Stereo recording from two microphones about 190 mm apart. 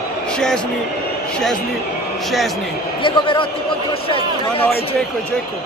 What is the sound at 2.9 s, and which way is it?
A man's voice, 25° left (ahead or behind).